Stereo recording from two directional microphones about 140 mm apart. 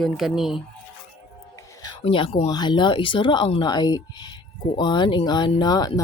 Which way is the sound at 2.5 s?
30° left (ahead or behind).